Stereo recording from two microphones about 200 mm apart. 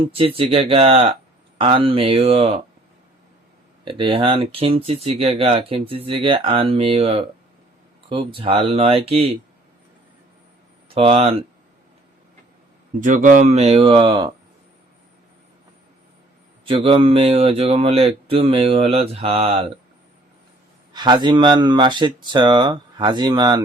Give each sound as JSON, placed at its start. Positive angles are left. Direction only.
{"t": 0.0, "sound": "speech", "side_deg": -30}
{"t": 3.8, "sound": "speech", "side_deg": -25}
{"t": 10.9, "sound": "speech", "side_deg": -30}
{"t": 13.0, "sound": "speech", "side_deg": -40}
{"t": 16.6, "sound": "speech", "side_deg": -25}
{"t": 20.9, "sound": "speech", "side_deg": -20}